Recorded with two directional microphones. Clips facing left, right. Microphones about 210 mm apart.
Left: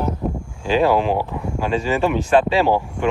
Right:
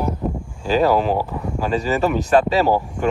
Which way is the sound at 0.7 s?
40° right (ahead or behind).